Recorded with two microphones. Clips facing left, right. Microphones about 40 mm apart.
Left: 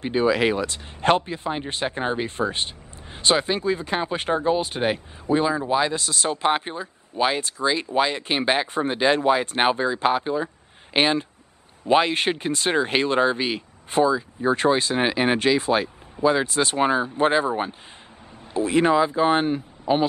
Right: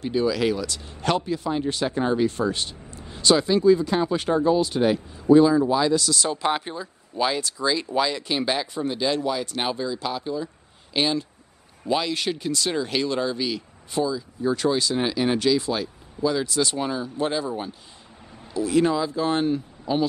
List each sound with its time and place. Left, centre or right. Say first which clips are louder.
0.0 s speech: left 2 dB; left